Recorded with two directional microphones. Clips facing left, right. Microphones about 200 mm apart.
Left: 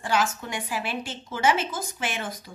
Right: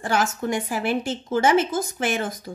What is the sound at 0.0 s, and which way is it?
A woman's voice, 45° right (ahead or behind).